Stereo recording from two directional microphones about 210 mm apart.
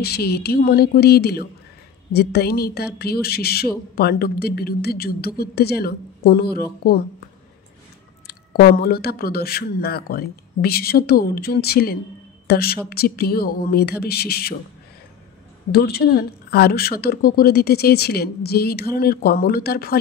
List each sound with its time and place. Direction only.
0.0 s a woman's voice: 50° left (ahead or behind)
8.3 s a woman's voice: 50° left (ahead or behind)
15.7 s a woman's voice: 45° left (ahead or behind)